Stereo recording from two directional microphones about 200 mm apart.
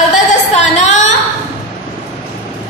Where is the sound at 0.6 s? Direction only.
35° left (ahead or behind).